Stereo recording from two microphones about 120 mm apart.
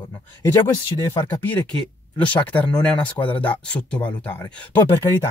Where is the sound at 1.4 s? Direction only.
15° left (ahead or behind).